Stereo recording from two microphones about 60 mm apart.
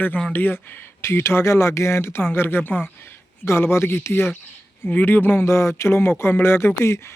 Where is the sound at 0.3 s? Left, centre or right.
Left.